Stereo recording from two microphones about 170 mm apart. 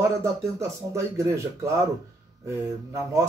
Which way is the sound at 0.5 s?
15° right (ahead or behind).